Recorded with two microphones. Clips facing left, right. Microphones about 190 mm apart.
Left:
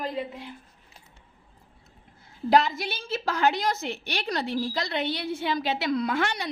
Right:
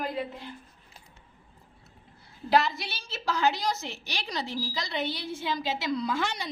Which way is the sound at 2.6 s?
50° left (ahead or behind).